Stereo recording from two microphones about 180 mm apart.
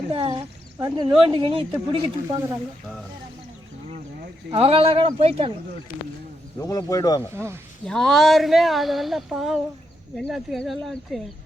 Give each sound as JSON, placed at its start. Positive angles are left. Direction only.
{"t": 0.1, "sound": "a woman's voice", "side_deg": -30}
{"t": 4.5, "sound": "speech", "side_deg": -30}
{"t": 6.6, "sound": "a man's voice", "side_deg": 20}
{"t": 7.3, "sound": "speech", "side_deg": -15}
{"t": 7.9, "sound": "speech", "side_deg": 0}